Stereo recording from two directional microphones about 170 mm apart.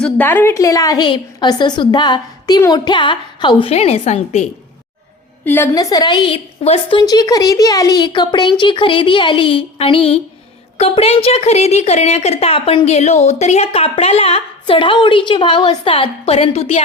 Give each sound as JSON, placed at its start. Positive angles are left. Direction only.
{"t": 0.0, "sound": "a woman's voice", "side_deg": 10}
{"t": 5.5, "sound": "a woman's voice", "side_deg": 15}